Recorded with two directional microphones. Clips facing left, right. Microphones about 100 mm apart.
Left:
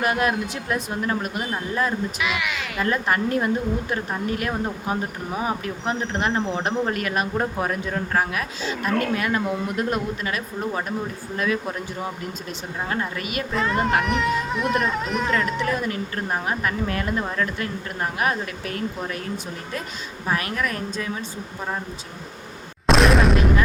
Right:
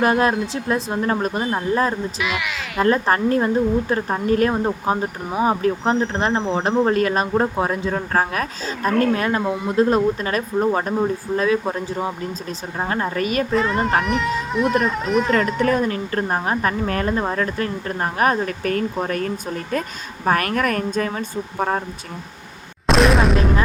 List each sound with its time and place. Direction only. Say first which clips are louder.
0.0 s speech: right 5 dB; 30° right (ahead or behind)
2.1 s speech: right 1 dB; centre (ahead or behind)
2.8 s speech: right 6 dB; 35° right (ahead or behind)
8.1 s speech: right 2 dB; 40° right (ahead or behind)
13.5 s speech: left 1 dB; centre (ahead or behind)
15.3 s speech: right 5 dB; 40° right (ahead or behind)
20.2 s speech: right 6 dB; 55° right (ahead or behind)
22.9 s boom: right 1 dB; centre (ahead or behind)